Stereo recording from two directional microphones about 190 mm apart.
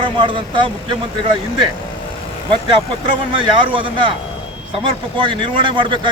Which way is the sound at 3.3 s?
25° right (ahead or behind).